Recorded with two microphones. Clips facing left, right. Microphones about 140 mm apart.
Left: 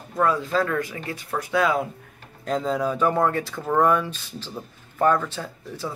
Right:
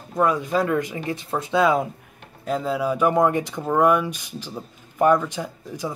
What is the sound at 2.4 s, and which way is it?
Speech, 5° right (ahead or behind).